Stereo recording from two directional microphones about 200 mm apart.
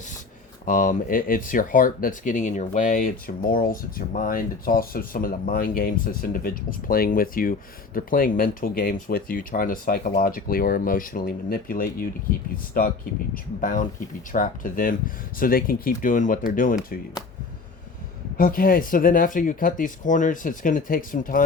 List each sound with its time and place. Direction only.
0.6 s speech: 40° left (ahead or behind)
18.3 s speech: 45° left (ahead or behind)